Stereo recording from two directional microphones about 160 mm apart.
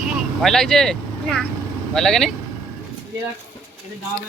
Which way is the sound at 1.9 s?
5° left (ahead or behind).